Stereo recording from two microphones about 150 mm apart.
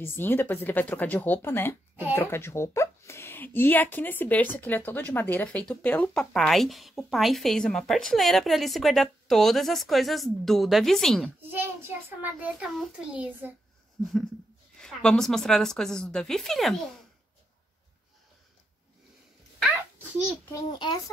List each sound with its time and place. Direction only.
0.0 s speech: 15° left (ahead or behind)
11.4 s a child's voice: 15° right (ahead or behind)
14.8 s speech: 5° left (ahead or behind)
20.7 s a child's voice: 30° left (ahead or behind)